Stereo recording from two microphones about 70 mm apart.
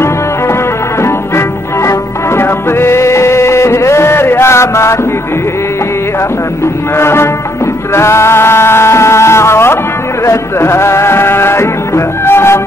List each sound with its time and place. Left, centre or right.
1.9 s music: left
7.0 s music: left